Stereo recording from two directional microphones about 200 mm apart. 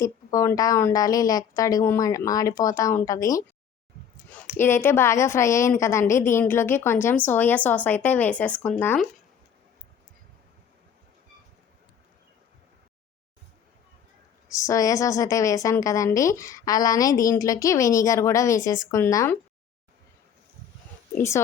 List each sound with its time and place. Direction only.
0.0 s a woman's voice: 15° left (ahead or behind)
14.5 s a woman's voice: 15° left (ahead or behind)
21.2 s a woman's voice: 15° left (ahead or behind)